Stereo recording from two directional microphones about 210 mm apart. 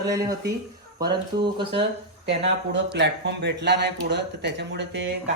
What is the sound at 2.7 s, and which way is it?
Speech, 55° right (ahead or behind).